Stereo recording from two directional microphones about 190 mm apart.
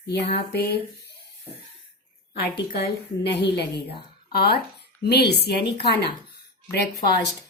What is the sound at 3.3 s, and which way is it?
Speech, 60° left (ahead or behind).